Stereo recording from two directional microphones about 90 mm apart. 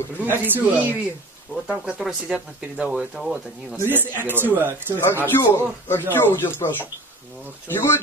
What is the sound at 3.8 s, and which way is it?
Speech, 20° right (ahead or behind).